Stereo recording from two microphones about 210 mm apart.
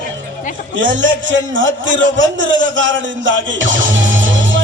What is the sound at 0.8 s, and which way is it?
A man's voice, 65° right (ahead or behind).